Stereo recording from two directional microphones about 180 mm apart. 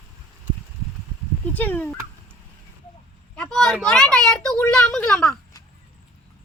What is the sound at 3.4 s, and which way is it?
Speech, 5° left (ahead or behind).